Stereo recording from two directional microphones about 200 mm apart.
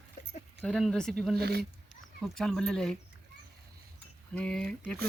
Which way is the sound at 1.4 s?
55° right (ahead or behind).